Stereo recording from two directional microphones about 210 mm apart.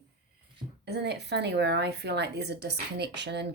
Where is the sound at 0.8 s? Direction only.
50° right (ahead or behind).